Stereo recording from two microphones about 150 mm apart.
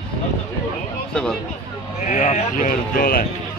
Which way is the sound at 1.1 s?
5° left (ahead or behind).